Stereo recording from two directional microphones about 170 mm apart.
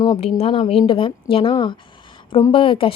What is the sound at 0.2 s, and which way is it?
Speech, 35° left (ahead or behind).